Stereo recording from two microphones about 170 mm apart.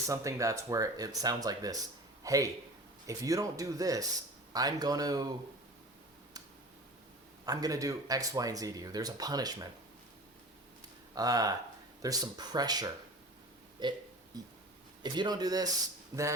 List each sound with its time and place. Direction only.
0.1 s speech: 20° right (ahead or behind)
7.4 s speech: 20° right (ahead or behind)
11.1 s speech: 20° right (ahead or behind)
15.0 s speech: 25° right (ahead or behind)